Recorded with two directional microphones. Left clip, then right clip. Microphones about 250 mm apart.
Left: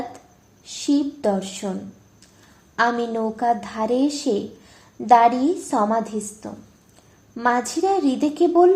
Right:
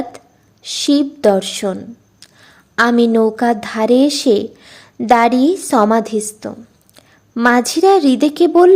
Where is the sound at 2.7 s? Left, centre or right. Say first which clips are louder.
Right 8 dB; right.